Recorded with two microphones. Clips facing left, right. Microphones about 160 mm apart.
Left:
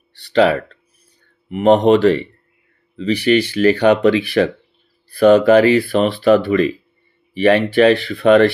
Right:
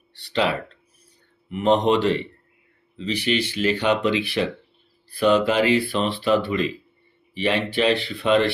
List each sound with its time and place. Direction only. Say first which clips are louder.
1.5 s speech: left 7 dB; 55° left (ahead or behind)